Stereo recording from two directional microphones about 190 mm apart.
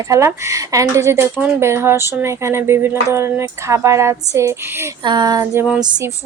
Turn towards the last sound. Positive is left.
turn(degrees=-20)  # may be behind; listen again after turning